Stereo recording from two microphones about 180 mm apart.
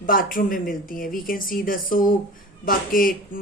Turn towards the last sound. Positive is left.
turn(degrees=50)  # may be behind; listen again after turning